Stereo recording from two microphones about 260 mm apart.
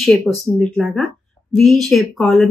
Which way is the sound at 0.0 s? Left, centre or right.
Centre.